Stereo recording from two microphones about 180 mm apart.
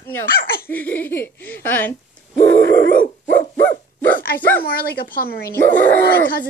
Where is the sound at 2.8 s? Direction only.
60° right (ahead or behind).